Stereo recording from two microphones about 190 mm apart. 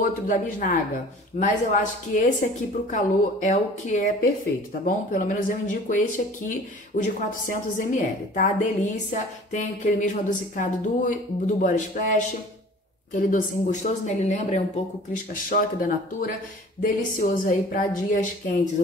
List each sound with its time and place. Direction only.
0.0 s a woman's voice: 45° left (ahead or behind)